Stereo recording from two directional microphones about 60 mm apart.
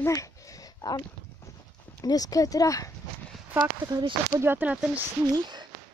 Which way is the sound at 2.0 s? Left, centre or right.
Left.